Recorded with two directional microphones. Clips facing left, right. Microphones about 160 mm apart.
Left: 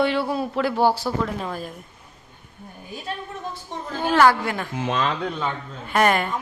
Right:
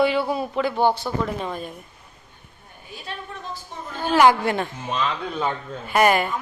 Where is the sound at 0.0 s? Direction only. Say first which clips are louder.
Right 1 dB; centre (ahead or behind).